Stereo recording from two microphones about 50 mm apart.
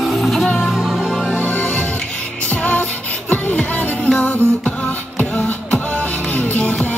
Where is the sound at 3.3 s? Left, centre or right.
Centre.